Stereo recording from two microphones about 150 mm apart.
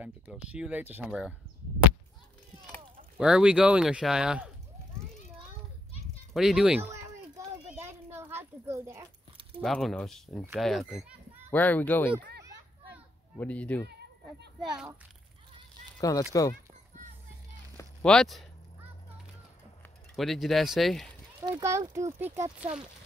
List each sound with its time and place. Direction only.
0.0 s speech: 5° right (ahead or behind)
3.2 s speech: 5° right (ahead or behind)
6.3 s speech: centre (ahead or behind)
6.8 s a sound: 20° right (ahead or behind)
9.6 s speech: centre (ahead or behind)
11.5 s speech: 10° left (ahead or behind)
13.4 s speech: 10° left (ahead or behind)
14.6 s speech: 5° right (ahead or behind)
16.0 s speech: 25° left (ahead or behind)
18.0 s speech: centre (ahead or behind)
20.2 s speech: centre (ahead or behind)
21.4 s speech: 25° right (ahead or behind)